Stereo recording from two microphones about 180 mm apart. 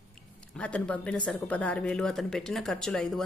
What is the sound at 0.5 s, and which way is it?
A woman's voice, 5° left (ahead or behind).